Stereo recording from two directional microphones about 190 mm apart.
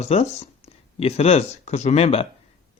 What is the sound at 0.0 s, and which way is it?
Speech, 35° left (ahead or behind).